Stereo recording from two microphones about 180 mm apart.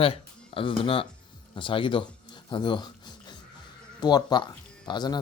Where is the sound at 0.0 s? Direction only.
30° left (ahead or behind).